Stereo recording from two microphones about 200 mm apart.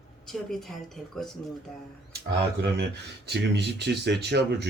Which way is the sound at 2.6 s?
55° right (ahead or behind).